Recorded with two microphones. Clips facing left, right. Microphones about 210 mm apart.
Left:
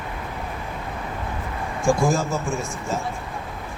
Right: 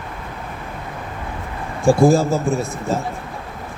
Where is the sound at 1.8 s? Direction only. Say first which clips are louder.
Right 7 dB; 35° right (ahead or behind).